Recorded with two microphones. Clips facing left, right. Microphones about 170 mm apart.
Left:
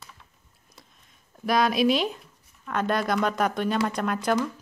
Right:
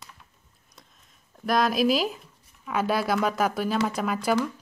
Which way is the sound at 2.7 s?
5° right (ahead or behind).